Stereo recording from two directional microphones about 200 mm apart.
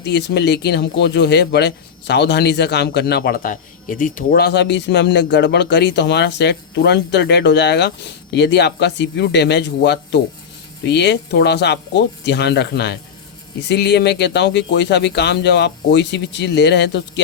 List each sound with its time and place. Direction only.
0.0 s speech: 60° left (ahead or behind)